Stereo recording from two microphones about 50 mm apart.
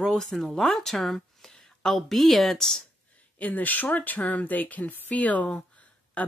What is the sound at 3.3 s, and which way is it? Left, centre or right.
Speech, left.